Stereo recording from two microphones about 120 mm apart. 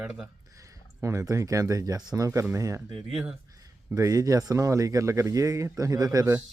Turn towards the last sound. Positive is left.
turn(degrees=-30)  # may be behind; listen again after turning